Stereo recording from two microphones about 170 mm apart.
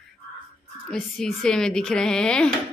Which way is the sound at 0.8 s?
5° left (ahead or behind).